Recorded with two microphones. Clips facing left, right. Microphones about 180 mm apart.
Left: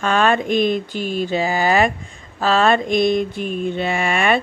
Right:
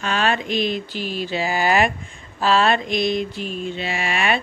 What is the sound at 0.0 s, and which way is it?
Mantra, 50° left (ahead or behind).